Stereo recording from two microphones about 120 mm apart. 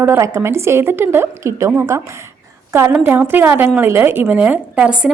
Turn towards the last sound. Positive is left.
turn(degrees=-10)  # may be behind; listen again after turning